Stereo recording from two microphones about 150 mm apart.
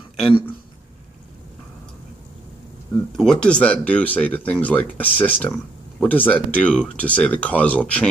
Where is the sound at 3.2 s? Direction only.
5° left (ahead or behind).